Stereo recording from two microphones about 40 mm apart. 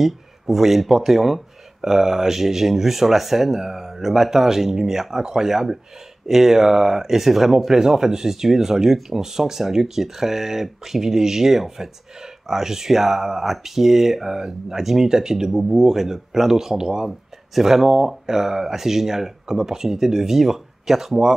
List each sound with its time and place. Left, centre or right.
0.0 s speech: centre